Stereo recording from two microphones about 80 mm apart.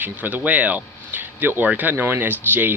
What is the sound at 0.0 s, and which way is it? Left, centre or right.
Speech, right.